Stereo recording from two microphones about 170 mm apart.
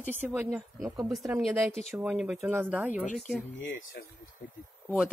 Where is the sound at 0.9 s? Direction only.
Centre (ahead or behind).